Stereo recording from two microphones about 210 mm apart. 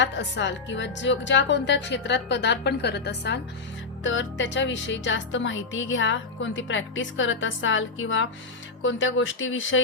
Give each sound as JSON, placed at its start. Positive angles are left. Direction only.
{"t": 0.0, "sound": "speech", "side_deg": 60}